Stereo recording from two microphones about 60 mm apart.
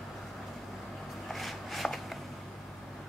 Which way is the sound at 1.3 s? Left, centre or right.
Centre.